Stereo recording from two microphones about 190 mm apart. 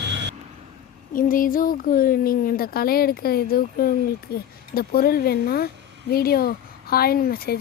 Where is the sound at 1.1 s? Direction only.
45° left (ahead or behind).